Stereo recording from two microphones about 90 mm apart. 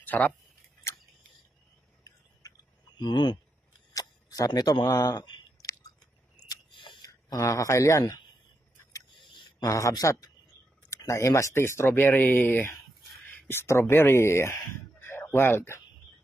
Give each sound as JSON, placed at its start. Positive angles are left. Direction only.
{"t": 0.0, "sound": "speech", "side_deg": 20}
{"t": 3.0, "sound": "speech", "side_deg": 55}
{"t": 3.9, "sound": "speech", "side_deg": 40}
{"t": 5.6, "sound": "chewing", "side_deg": 40}
{"t": 6.3, "sound": "a sound", "side_deg": 60}
{"t": 7.0, "sound": "speech", "side_deg": 40}
{"t": 9.7, "sound": "speech", "side_deg": 40}